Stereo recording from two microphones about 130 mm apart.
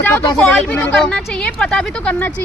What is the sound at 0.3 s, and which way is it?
Speech, 10° left (ahead or behind).